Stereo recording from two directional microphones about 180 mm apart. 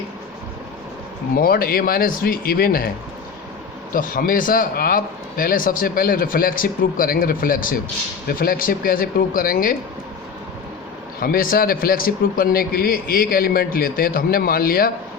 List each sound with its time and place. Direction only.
1.4 s speech: 55° left (ahead or behind)
3.9 s a man's voice: 50° left (ahead or behind)
11.2 s a man's voice: 55° left (ahead or behind)